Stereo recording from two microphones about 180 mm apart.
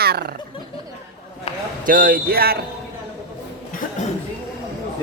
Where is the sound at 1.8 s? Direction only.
50° right (ahead or behind).